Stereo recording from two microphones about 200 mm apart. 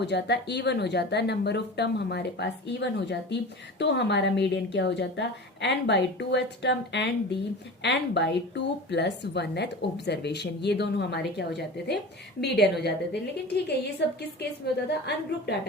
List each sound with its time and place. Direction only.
0.0 s a woman's voice: 60° left (ahead or behind)
14.0 s a woman's voice: 55° left (ahead or behind)